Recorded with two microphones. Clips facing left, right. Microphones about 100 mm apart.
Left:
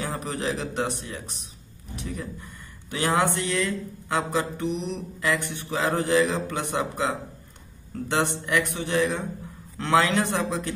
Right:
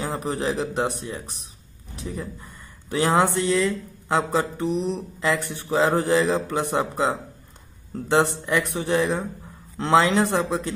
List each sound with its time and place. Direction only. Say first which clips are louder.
0.0 s a man's voice: right 3 dB; 25° right (ahead or behind)
4.1 s a man's voice: right 3 dB; 35° right (ahead or behind)